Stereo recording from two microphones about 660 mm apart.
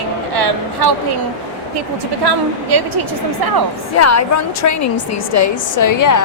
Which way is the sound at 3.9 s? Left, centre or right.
Left.